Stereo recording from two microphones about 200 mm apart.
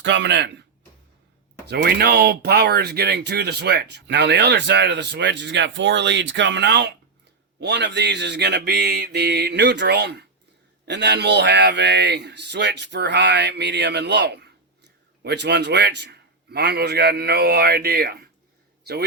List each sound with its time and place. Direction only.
0.0 s speech: 60° right (ahead or behind)
1.6 s speech: 55° right (ahead or behind)